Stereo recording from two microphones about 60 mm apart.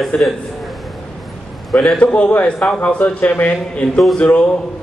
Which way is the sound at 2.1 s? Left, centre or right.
Left.